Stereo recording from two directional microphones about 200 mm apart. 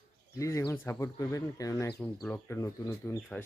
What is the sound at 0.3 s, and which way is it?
Speech, 15° left (ahead or behind).